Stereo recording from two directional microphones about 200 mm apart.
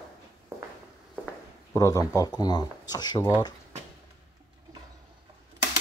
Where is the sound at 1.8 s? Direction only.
20° left (ahead or behind).